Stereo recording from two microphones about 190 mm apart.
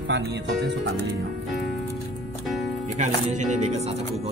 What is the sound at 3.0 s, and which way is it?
Speech, 40° right (ahead or behind).